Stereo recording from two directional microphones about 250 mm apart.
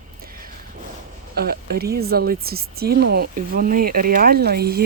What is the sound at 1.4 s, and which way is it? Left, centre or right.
Speech, right.